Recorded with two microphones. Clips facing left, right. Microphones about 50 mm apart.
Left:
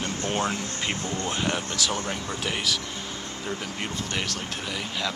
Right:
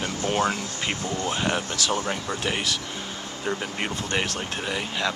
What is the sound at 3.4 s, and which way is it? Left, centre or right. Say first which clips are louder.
Speech: right 5 dB; right.